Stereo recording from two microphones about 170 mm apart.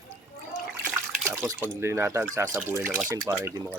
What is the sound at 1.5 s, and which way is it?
Speech, 15° right (ahead or behind).